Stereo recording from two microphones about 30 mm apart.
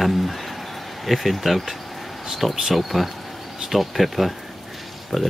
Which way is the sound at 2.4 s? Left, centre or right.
Centre.